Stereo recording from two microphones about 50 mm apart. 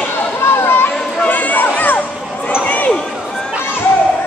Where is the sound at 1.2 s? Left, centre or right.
Left.